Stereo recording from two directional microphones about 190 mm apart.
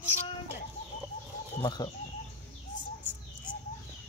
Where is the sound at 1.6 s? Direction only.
25° left (ahead or behind).